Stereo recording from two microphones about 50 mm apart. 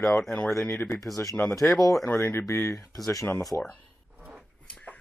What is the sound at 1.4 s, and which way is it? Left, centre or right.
Speech, left.